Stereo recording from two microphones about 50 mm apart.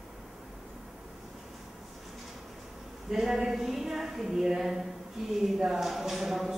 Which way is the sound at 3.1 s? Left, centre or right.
Centre.